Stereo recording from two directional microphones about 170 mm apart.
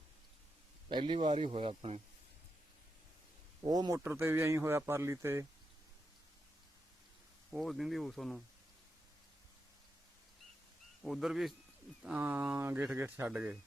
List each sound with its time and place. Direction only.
0.9 s speech: 30° right (ahead or behind)
3.6 s speech: 25° right (ahead or behind)
7.5 s speech: centre (ahead or behind)
11.0 s speech: centre (ahead or behind)